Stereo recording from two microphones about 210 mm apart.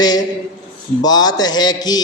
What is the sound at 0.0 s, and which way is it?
A man's voice, 20° left (ahead or behind).